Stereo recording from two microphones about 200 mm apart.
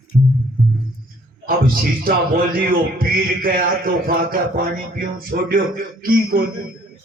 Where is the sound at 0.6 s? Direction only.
Centre (ahead or behind).